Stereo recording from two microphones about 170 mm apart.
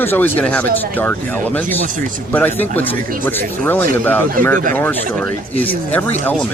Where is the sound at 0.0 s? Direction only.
10° left (ahead or behind).